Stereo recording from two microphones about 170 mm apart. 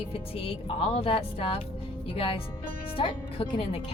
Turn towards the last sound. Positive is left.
turn(degrees=35)  # may be behind; listen again after turning